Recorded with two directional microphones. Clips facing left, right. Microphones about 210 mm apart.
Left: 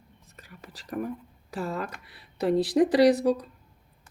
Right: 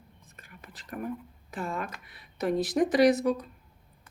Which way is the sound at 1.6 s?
35° left (ahead or behind).